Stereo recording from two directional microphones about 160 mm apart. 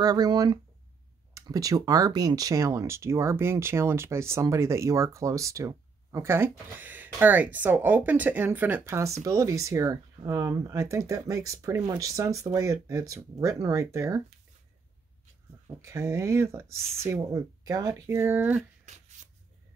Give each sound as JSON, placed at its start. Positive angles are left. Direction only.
{"t": 0.0, "sound": "speech", "side_deg": -25}
{"t": 15.8, "sound": "speech", "side_deg": -15}